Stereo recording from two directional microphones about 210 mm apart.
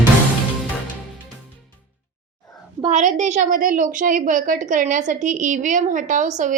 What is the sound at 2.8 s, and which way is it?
A woman's voice, 35° right (ahead or behind).